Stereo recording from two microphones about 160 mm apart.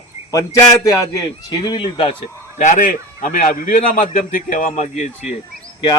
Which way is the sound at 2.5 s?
50° left (ahead or behind).